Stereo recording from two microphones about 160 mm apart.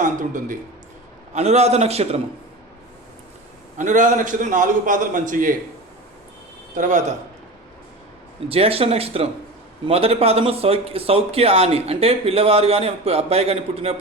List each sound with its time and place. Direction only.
0.0 s speech: 55° right (ahead or behind)
1.3 s speech: 40° right (ahead or behind)
3.8 s a man's voice: 50° right (ahead or behind)
6.7 s a man's voice: 50° right (ahead or behind)
8.4 s speech: 35° right (ahead or behind)